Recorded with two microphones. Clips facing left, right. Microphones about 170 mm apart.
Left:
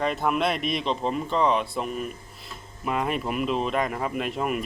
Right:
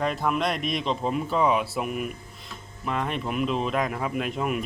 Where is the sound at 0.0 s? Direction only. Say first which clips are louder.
Left 1 dB; centre (ahead or behind).